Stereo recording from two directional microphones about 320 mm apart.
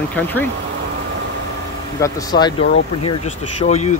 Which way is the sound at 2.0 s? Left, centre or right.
Centre.